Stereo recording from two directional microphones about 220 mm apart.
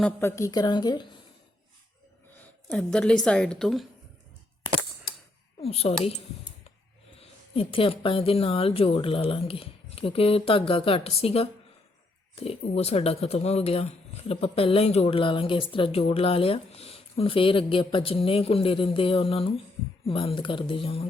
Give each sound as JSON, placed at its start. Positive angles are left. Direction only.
{"t": 0.0, "sound": "a woman's voice", "side_deg": 10}
{"t": 2.6, "sound": "a woman's voice", "side_deg": 5}
{"t": 5.6, "sound": "speech", "side_deg": 25}
{"t": 7.2, "sound": "speech", "side_deg": 25}